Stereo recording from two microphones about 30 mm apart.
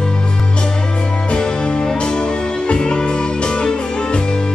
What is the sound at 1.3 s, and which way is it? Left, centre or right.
Music, left.